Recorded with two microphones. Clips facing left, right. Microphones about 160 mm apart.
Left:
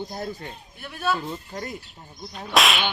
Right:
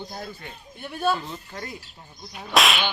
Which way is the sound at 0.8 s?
30° right (ahead or behind).